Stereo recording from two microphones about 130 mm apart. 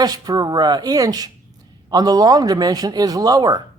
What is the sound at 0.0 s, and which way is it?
Speech, 30° right (ahead or behind).